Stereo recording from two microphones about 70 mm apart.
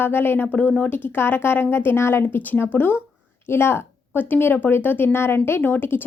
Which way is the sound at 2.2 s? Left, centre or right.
Left.